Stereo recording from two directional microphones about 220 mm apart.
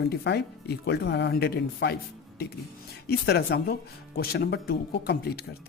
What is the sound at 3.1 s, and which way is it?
Speech, 45° left (ahead or behind).